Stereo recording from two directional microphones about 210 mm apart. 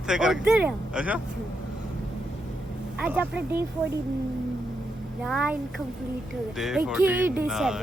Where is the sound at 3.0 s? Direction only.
5° right (ahead or behind).